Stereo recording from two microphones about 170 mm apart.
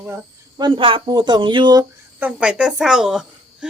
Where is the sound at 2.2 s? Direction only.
10° right (ahead or behind).